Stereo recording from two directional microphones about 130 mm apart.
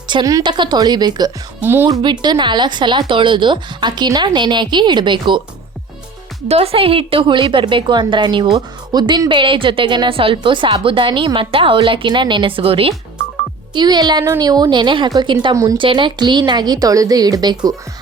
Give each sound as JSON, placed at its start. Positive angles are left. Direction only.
{"t": 0.1, "sound": "speech", "side_deg": -30}
{"t": 1.6, "sound": "speech", "side_deg": -15}
{"t": 2.0, "sound": "speech", "side_deg": -35}
{"t": 6.5, "sound": "speech", "side_deg": -50}
{"t": 13.7, "sound": "speech", "side_deg": -35}